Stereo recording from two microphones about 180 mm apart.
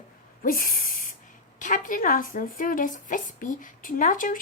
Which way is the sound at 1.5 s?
45° left (ahead or behind).